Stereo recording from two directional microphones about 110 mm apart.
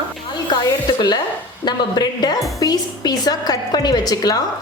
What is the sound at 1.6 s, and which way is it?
A woman's voice, 40° left (ahead or behind).